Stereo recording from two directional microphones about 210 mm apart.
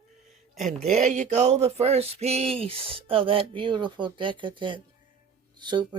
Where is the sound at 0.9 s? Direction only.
35° right (ahead or behind).